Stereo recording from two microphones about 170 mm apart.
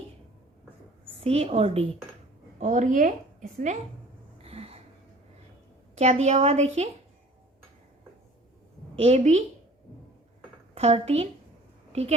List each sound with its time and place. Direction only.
1.2 s a woman's voice: 40° right (ahead or behind)
4.4 s a sound: 35° right (ahead or behind)
6.0 s a woman's voice: 40° right (ahead or behind)
9.0 s a woman's voice: 40° right (ahead or behind)
10.8 s a woman's voice: 35° right (ahead or behind)
11.9 s a sound: 40° right (ahead or behind)